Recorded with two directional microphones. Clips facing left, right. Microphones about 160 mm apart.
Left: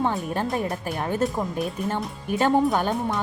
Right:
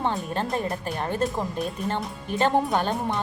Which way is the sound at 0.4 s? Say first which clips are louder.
Left 1 dB; 5° left (ahead or behind).